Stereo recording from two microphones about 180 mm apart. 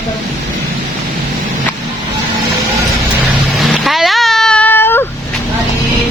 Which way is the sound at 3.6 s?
Centre (ahead or behind).